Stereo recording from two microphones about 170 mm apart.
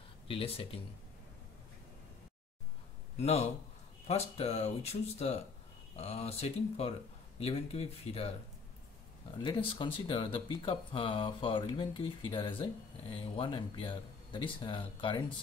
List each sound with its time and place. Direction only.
0.3 s speech: 35° left (ahead or behind)
3.2 s speech: 40° left (ahead or behind)
5.9 s speech: 35° left (ahead or behind)
9.4 s speech: 30° left (ahead or behind)